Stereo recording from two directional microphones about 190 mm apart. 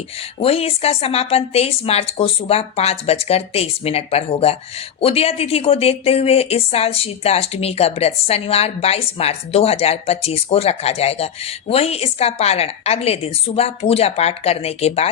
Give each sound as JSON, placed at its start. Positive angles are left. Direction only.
{"t": 0.3, "sound": "speech", "side_deg": 30}